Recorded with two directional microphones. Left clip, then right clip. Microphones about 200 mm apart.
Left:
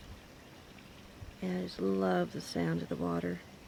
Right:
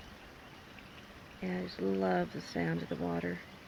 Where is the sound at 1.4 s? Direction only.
15° left (ahead or behind).